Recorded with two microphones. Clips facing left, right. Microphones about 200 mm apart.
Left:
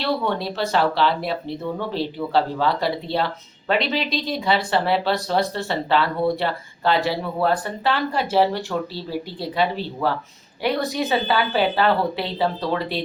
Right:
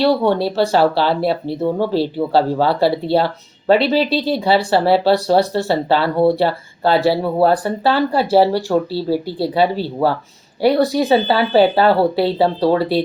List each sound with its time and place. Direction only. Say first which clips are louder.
0.3 s speech: right 8 dB; 35° right (ahead or behind)